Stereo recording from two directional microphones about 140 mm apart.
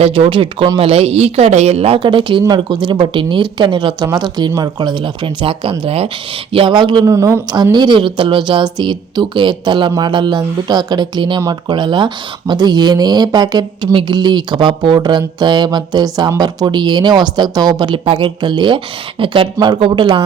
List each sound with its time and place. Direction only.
0.0 s a woman's voice: 35° right (ahead or behind)
7.1 s a woman's voice: 20° right (ahead or behind)